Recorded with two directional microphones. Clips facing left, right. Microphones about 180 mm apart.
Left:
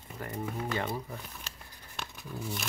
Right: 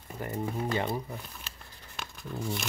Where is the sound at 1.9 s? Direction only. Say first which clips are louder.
Right 2 dB; centre (ahead or behind).